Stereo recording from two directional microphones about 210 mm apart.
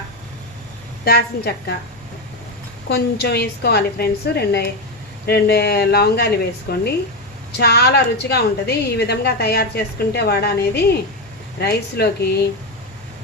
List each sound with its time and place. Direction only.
1.0 s a woman's voice: 50° left (ahead or behind)
2.9 s a woman's voice: 50° left (ahead or behind)